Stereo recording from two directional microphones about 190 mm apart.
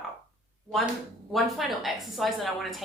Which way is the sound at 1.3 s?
Centre (ahead or behind).